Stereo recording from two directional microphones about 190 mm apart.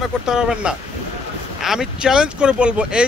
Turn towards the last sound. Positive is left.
turn(degrees=-5)  # may be behind; listen again after turning